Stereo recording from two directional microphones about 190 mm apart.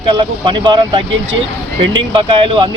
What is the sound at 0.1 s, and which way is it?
Speech, 25° right (ahead or behind).